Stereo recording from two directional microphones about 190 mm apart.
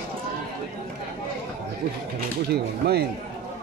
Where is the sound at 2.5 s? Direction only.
60° right (ahead or behind).